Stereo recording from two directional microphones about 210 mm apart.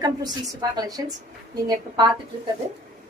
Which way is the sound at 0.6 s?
15° right (ahead or behind).